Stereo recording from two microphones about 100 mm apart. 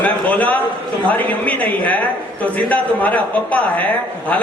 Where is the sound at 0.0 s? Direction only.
15° left (ahead or behind).